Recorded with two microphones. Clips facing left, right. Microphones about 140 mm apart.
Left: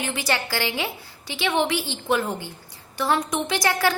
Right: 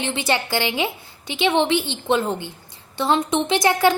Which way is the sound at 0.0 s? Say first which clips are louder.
Right 3 dB; 25° right (ahead or behind).